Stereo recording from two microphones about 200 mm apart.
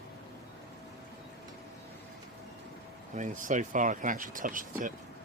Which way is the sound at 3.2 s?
40° right (ahead or behind).